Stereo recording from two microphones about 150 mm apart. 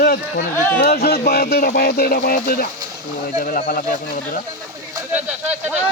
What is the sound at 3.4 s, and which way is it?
Speech, 70° left (ahead or behind).